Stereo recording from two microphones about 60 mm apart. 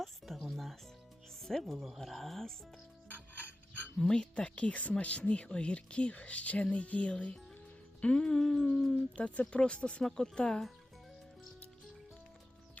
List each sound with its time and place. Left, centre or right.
0.0 s music: centre
1.4 s speech: centre
3.9 s speech: centre
9.1 s speech: centre